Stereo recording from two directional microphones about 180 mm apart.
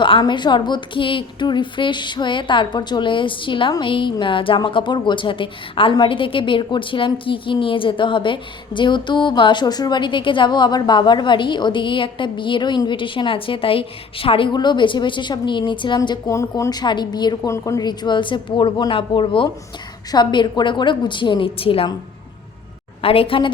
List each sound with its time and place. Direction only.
0.0 s a woman's voice: 25° left (ahead or behind)
23.0 s a woman's voice: 30° left (ahead or behind)